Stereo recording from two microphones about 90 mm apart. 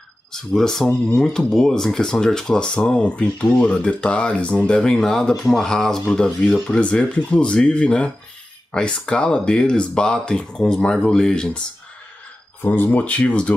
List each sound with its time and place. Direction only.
0.3 s speech: 5° left (ahead or behind)
12.6 s speech: 20° left (ahead or behind)